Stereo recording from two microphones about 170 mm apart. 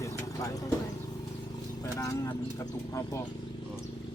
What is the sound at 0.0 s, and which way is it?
Vehicle, 20° left (ahead or behind).